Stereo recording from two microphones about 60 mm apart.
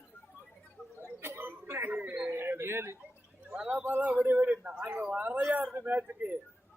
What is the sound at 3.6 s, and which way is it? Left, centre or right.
A man's voice, right.